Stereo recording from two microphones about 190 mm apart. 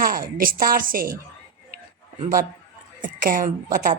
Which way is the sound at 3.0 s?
45° right (ahead or behind).